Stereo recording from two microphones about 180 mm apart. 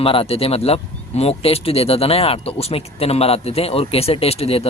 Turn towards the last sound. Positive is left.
turn(degrees=35)  # may be behind; listen again after turning